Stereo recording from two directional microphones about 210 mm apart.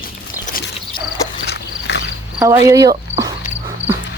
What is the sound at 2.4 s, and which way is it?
Speech, 15° right (ahead or behind).